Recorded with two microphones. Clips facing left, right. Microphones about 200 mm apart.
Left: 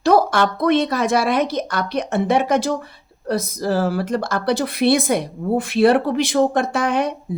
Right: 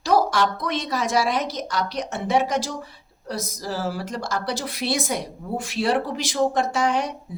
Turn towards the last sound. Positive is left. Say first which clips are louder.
# left 4 dB
turn(degrees=55)  # may be behind; listen again after turning